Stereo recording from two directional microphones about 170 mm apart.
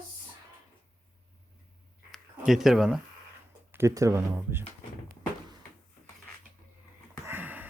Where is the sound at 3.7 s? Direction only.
15° right (ahead or behind).